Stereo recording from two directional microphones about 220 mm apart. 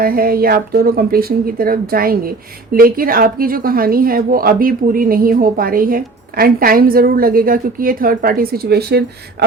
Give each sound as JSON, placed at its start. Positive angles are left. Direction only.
{"t": 0.0, "sound": "a woman's voice", "side_deg": -40}